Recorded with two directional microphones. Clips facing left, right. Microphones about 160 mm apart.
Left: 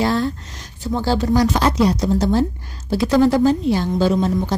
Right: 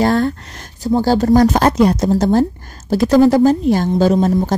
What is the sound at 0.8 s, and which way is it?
A woman's voice, 40° right (ahead or behind).